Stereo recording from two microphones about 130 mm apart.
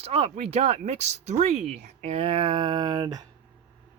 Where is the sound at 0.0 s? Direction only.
55° right (ahead or behind); by 3.2 s 30° right (ahead or behind).